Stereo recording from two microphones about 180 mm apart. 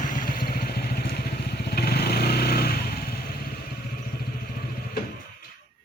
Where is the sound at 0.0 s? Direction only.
50° left (ahead or behind).